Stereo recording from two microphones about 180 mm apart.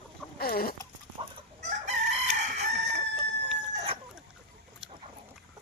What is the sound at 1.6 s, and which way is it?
Chicken, 40° right (ahead or behind).